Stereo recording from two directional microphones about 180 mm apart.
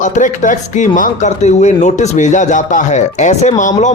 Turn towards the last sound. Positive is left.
turn(degrees=40)  # may be behind; listen again after turning